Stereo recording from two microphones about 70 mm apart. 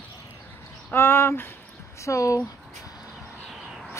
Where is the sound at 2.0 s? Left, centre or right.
Left.